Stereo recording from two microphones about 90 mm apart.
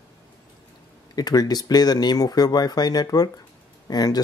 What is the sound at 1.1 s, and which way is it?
Speech, 45° left (ahead or behind).